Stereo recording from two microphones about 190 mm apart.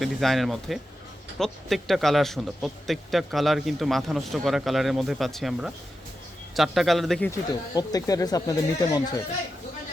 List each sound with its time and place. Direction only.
0.0 s a man's voice: centre (ahead or behind)
7.3 s speech: 20° left (ahead or behind)